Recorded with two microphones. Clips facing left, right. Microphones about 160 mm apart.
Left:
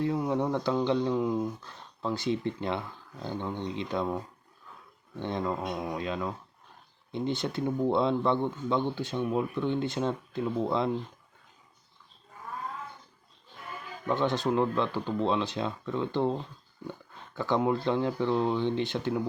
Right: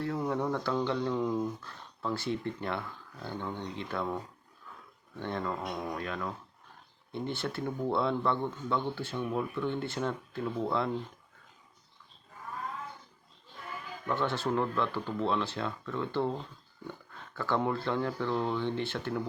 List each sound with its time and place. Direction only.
0.3 s speech: 20° left (ahead or behind)
5.2 s speech: 15° left (ahead or behind)
14.1 s speech: 15° left (ahead or behind)